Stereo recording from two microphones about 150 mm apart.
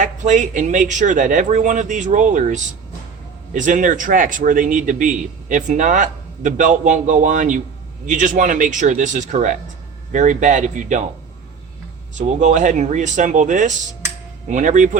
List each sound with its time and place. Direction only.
0.0 s a man's voice: 55° right (ahead or behind)
12.1 s a man's voice: 55° right (ahead or behind)